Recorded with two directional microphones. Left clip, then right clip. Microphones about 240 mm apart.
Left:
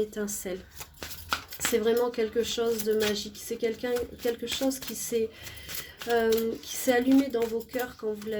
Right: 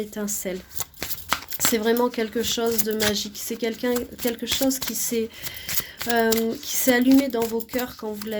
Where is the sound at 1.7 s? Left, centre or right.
Right.